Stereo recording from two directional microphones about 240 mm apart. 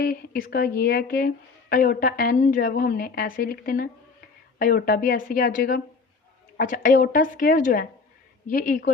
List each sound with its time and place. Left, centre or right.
0.0 s a woman's voice: left